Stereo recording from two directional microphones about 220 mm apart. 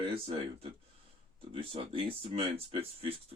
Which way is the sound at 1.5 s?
25° right (ahead or behind).